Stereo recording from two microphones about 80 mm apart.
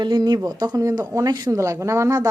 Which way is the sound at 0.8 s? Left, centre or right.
Right.